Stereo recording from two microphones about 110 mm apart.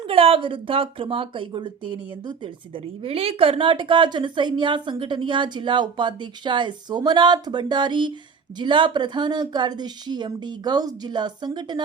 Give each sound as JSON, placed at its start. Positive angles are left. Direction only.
{"t": 0.1, "sound": "a woman's voice", "side_deg": -55}